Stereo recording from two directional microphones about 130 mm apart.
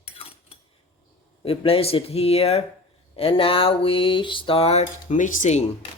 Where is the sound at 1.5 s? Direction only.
45° left (ahead or behind); by 5.6 s 65° left (ahead or behind).